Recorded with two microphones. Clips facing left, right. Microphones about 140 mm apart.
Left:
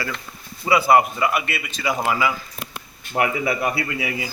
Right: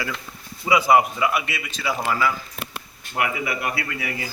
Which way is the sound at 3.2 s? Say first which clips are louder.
Left 4 dB; 35° left (ahead or behind).